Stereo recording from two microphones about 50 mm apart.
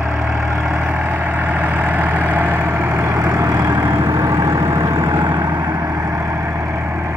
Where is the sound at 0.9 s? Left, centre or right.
Right.